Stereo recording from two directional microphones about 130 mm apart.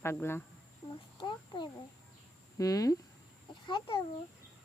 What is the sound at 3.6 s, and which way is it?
Chicken, 40° left (ahead or behind).